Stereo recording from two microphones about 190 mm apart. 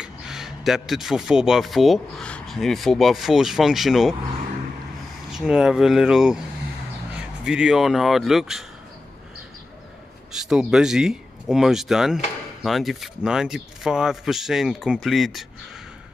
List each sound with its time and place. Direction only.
0.0 s speech: centre (ahead or behind)
5.3 s speech: 5° right (ahead or behind)
10.3 s speech: centre (ahead or behind)